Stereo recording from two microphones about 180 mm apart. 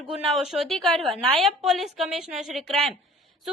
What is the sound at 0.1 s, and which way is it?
A woman's voice, centre (ahead or behind).